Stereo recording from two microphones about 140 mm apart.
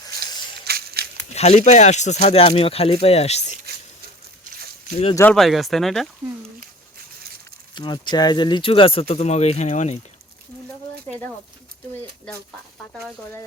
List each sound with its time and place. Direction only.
0.7 s a sound: 90° right
1.3 s speech: 50° left (ahead or behind)
4.9 s speech: 50° left (ahead or behind)
5.3 s speech: centre (ahead or behind)
7.8 s speech: 30° left (ahead or behind); by 10.0 s 55° left (ahead or behind)